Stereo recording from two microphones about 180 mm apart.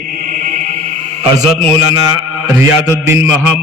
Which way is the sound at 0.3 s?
45° right (ahead or behind).